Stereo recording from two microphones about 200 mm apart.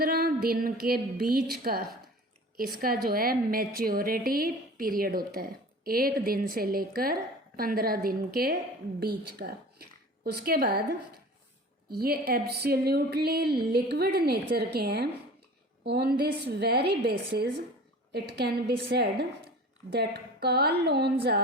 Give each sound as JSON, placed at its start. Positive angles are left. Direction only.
{"t": 0.0, "sound": "a woman's voice", "side_deg": -50}
{"t": 11.9, "sound": "a woman's voice", "side_deg": -50}